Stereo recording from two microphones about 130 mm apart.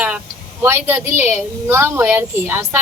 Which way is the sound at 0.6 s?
15° right (ahead or behind).